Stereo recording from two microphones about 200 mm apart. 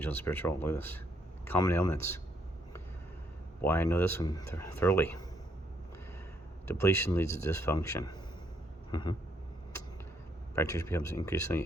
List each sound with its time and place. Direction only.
0.0 s speech: 10° left (ahead or behind)
3.6 s speech: 10° left (ahead or behind)
6.7 s speech: 15° left (ahead or behind)
10.5 s speech: 15° left (ahead or behind)